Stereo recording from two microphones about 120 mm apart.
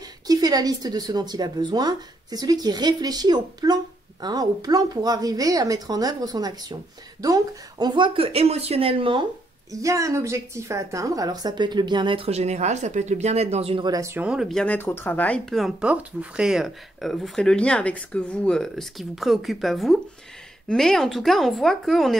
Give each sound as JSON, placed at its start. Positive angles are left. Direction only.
{"t": 0.3, "sound": "a woman's voice", "side_deg": -35}
{"t": 9.7, "sound": "a woman's voice", "side_deg": -25}
{"t": 12.3, "sound": "speech", "side_deg": -65}
{"t": 13.8, "sound": "a woman's voice", "side_deg": -30}
{"t": 14.1, "sound": "speech", "side_deg": -5}
{"t": 14.6, "sound": "speech", "side_deg": 15}